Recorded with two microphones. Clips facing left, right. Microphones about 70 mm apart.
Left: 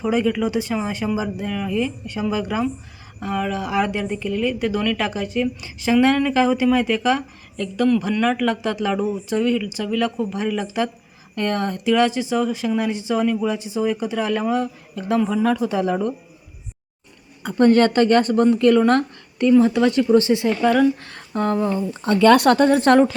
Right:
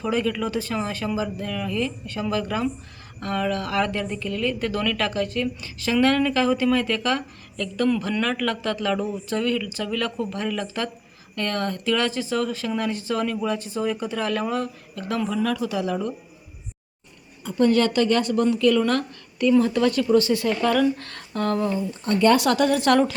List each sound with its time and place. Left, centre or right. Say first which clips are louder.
0.0 s a woman's voice: left 4 dB; centre
15.3 s speech: left 5 dB; left
17.6 s a woman's voice: left 4 dB; left
19.5 s speech: left 5 dB; centre
21.9 s a woman's voice: left 5 dB; left
22.5 s speech: left 4 dB; left